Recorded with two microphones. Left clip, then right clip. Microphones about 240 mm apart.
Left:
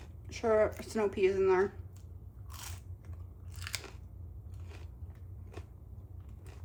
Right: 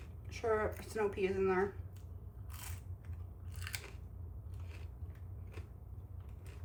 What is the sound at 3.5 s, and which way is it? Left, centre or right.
Biting, left.